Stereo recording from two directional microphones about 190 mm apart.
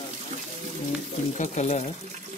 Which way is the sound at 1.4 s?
40° left (ahead or behind).